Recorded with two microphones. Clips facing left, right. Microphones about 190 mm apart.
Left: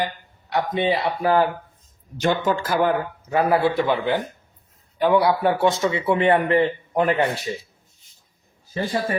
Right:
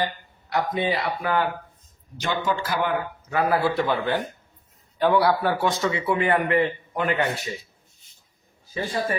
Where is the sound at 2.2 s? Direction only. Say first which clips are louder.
Left 5 dB; 50° left (ahead or behind).